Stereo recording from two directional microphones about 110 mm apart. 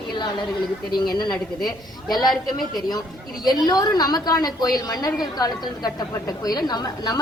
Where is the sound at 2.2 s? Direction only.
Centre (ahead or behind).